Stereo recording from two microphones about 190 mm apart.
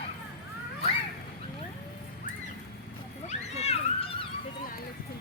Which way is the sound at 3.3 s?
35° left (ahead or behind).